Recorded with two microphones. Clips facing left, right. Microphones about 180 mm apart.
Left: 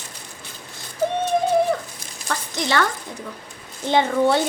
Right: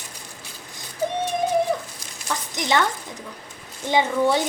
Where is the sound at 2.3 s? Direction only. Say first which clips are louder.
Even; 15° right (ahead or behind).